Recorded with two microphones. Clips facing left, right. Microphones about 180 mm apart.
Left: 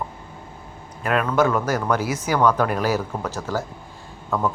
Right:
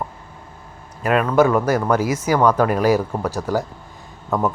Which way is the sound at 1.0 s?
5° right (ahead or behind).